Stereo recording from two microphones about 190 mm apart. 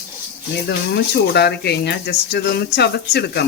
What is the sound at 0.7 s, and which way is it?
Speech, 60° left (ahead or behind).